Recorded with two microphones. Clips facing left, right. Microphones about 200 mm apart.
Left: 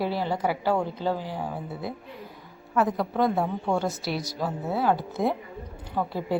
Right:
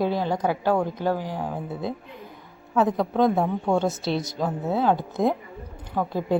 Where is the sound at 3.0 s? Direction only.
20° right (ahead or behind).